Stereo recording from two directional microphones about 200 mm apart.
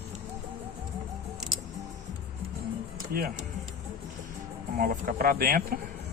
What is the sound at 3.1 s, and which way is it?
Speech, 45° right (ahead or behind).